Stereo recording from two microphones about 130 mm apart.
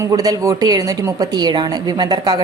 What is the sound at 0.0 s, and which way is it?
A woman's voice, 30° right (ahead or behind).